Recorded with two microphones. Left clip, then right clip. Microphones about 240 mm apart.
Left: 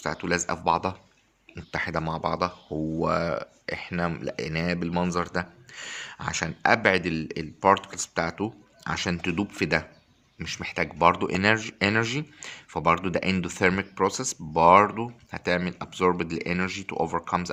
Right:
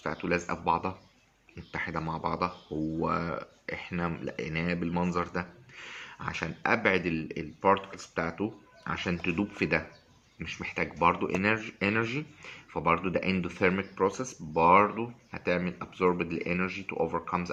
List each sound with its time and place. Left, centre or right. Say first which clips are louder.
0.0 s speech: left 4 dB; left